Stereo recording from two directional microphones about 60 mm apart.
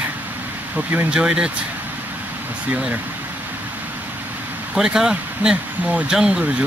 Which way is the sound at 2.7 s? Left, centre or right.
Right.